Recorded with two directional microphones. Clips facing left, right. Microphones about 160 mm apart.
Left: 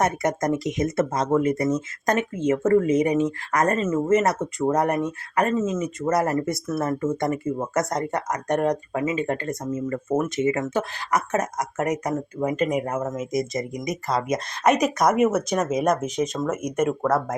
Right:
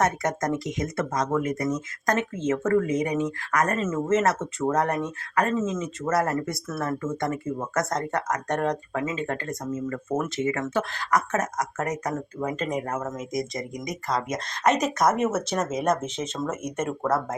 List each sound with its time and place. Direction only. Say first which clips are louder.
0.0 s speech: left 2 dB; 20° left (ahead or behind)
3.8 s speech: left 3 dB; 15° left (ahead or behind)
14.7 s speech: left 3 dB; 25° right (ahead or behind)
15.1 s speech: left 4 dB; 10° left (ahead or behind)
17.0 s speech: left 3 dB; 5° right (ahead or behind)